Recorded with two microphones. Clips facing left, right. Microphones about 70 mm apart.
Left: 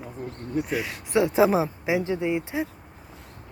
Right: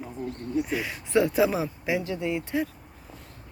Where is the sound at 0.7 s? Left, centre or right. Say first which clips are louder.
Left 1 dB; centre.